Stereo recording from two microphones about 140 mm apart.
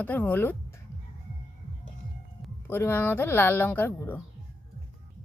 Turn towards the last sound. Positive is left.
turn(degrees=15)  # may be behind; listen again after turning